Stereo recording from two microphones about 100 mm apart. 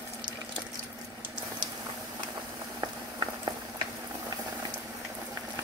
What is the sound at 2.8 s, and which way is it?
Boiling, 35° right (ahead or behind).